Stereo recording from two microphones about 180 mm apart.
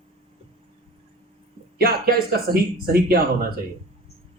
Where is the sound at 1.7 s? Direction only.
55° right (ahead or behind).